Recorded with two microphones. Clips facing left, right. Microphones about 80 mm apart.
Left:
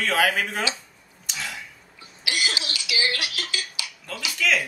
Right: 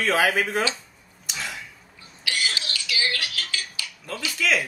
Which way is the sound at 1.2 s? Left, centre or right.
Centre.